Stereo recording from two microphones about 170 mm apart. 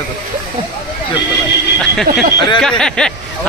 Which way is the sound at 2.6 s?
5° left (ahead or behind).